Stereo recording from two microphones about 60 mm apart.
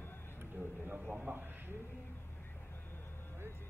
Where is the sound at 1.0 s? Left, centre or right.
Centre.